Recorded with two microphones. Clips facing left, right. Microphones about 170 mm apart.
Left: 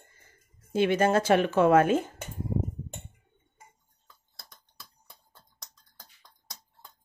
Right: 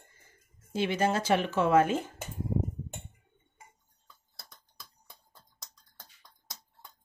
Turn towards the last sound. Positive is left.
turn(degrees=0)  # may be behind; listen again after turning